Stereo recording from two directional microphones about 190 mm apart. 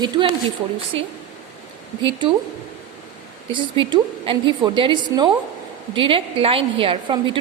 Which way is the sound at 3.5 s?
25° right (ahead or behind).